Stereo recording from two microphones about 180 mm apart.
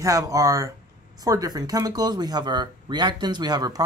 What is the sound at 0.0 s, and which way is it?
Speech, 20° right (ahead or behind).